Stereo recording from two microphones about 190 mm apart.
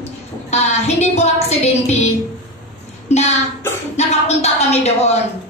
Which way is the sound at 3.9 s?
35° left (ahead or behind).